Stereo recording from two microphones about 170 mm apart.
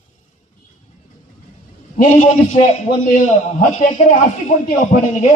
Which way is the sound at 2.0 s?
35° left (ahead or behind).